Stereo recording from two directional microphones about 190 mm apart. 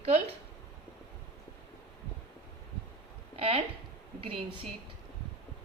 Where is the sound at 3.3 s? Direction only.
30° right (ahead or behind).